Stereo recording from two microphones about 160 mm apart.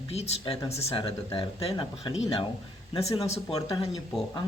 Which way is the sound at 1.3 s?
35° left (ahead or behind).